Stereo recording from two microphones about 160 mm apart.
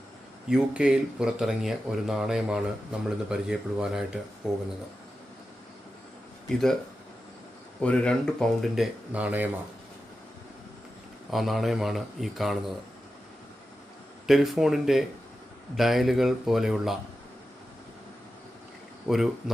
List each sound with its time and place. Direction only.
0.4 s speech: 5° right (ahead or behind)
7.8 s speech: 5° left (ahead or behind); by 9.5 s 10° right (ahead or behind)
11.3 s speech: centre (ahead or behind)
14.3 s speech: centre (ahead or behind)
19.0 s speech: centre (ahead or behind)